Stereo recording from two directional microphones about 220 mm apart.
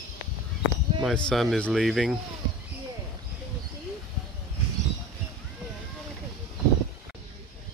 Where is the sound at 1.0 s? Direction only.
Centre (ahead or behind).